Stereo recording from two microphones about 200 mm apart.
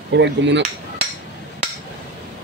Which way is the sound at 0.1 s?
60° right (ahead or behind).